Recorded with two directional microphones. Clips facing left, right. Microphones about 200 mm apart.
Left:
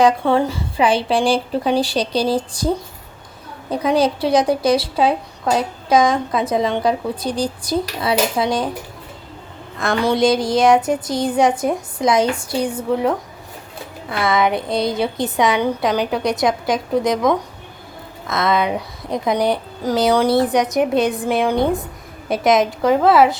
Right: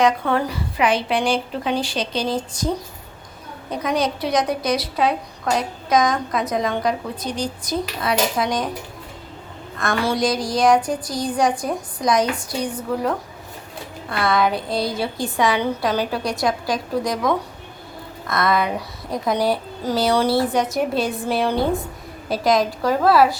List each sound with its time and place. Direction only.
0.0 s a woman's voice: 25° left (ahead or behind)
9.8 s a woman's voice: 20° left (ahead or behind)
14.2 s a woman's voice: 20° left (ahead or behind)